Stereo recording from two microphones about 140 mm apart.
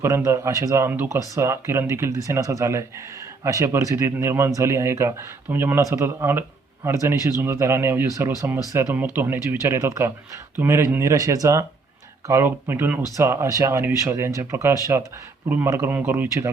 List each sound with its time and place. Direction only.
0.0 s speech: 20° right (ahead or behind)